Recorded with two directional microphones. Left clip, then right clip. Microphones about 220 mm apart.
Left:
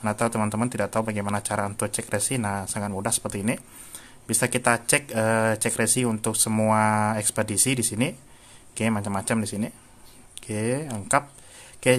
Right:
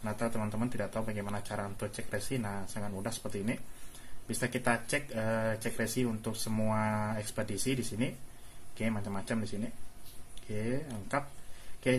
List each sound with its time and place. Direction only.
0.0 s speech: 35° left (ahead or behind)
10.6 s speech: 35° left (ahead or behind)